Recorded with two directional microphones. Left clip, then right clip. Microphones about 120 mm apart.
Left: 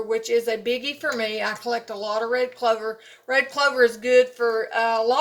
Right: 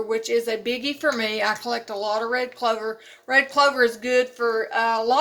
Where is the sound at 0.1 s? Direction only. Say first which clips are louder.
Left 2 dB; 45° right (ahead or behind).